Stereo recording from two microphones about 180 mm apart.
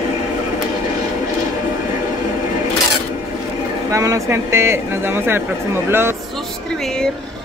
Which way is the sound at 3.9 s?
20° right (ahead or behind).